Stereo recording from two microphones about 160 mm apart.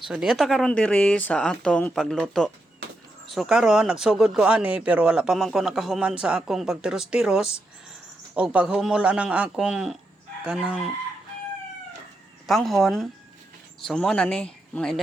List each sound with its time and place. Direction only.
0.1 s speech: 5° right (ahead or behind)
12.5 s speech: centre (ahead or behind)